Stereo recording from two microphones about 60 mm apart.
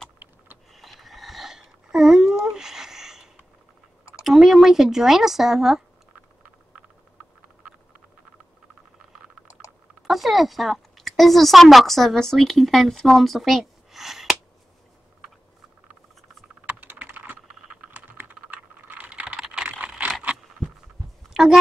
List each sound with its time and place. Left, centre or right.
0.7 s a sound: centre
4.2 s speech: centre
10.0 s speech: centre
16.6 s typing: right
17.9 s computer keyboard: right
20.2 s scrape: right
21.3 s a sound: centre